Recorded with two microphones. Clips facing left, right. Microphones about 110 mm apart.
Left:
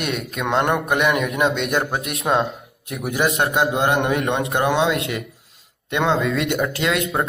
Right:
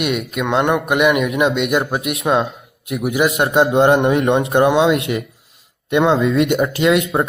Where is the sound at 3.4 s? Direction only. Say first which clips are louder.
Right 9 dB; 25° right (ahead or behind).